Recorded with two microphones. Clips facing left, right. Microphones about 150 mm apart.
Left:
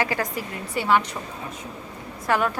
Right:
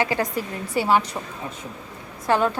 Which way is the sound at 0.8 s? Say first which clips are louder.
Right 1 dB; 35° right (ahead or behind).